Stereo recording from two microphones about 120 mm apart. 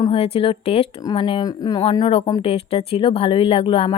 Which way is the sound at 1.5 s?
30° left (ahead or behind).